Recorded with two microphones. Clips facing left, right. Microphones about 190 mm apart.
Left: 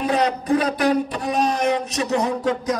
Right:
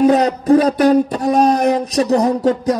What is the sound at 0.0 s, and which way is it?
A man's voice, 40° right (ahead or behind).